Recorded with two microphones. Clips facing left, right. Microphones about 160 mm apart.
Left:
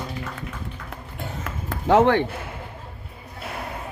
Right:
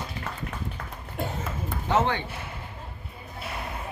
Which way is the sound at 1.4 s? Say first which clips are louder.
Left 7 dB; 85° left.